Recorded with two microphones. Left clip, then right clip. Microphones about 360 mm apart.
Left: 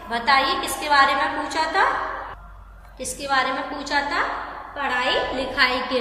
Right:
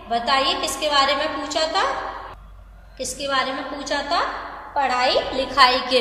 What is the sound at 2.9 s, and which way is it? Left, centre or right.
A woman's voice, centre.